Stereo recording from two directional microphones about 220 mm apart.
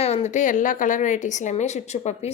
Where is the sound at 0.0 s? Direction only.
30° left (ahead or behind).